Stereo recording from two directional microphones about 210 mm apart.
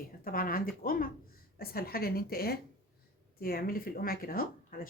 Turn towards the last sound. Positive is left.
turn(degrees=45)  # may be behind; listen again after turning